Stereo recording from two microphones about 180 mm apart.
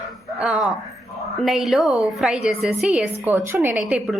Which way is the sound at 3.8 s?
Centre (ahead or behind).